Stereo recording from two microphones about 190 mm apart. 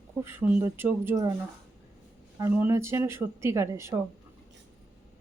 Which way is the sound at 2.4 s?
10° right (ahead or behind).